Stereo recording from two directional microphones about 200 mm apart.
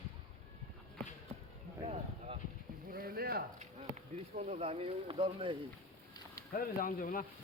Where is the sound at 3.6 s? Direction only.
35° right (ahead or behind).